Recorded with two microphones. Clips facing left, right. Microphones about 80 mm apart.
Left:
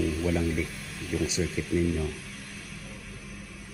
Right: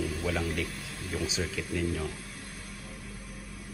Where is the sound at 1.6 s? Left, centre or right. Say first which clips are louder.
Left 4 dB; right.